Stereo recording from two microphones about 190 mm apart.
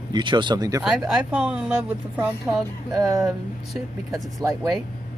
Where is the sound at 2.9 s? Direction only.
20° right (ahead or behind).